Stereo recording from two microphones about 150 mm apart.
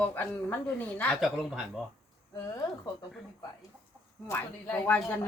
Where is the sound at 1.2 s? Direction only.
Centre (ahead or behind).